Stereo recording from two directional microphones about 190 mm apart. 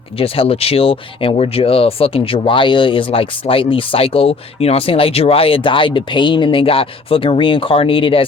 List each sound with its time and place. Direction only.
0.2 s speech: 30° left (ahead or behind)